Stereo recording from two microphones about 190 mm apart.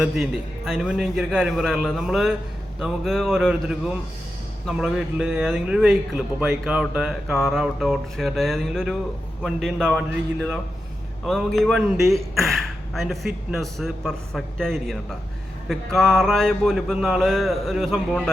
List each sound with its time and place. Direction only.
0.0 s speech: centre (ahead or behind)